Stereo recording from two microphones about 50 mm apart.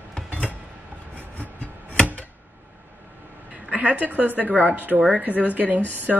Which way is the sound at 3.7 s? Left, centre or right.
Right.